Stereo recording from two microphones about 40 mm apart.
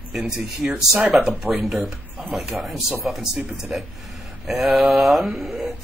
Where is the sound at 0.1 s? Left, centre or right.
Centre.